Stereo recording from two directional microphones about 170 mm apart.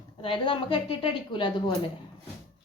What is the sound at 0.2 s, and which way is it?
A woman's voice, 30° left (ahead or behind).